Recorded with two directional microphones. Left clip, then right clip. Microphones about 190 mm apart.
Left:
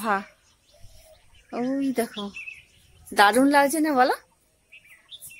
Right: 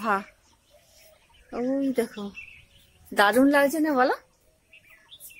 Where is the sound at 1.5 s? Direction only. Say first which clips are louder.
Even; 20° left (ahead or behind).